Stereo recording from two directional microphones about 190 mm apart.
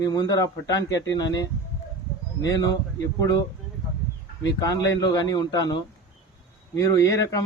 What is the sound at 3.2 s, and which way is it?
Speech, 20° left (ahead or behind).